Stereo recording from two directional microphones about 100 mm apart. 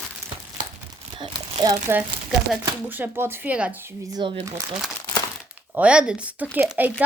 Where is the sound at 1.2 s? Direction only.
50° right (ahead or behind).